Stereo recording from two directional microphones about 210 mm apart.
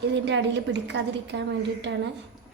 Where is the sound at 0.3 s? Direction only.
55° right (ahead or behind).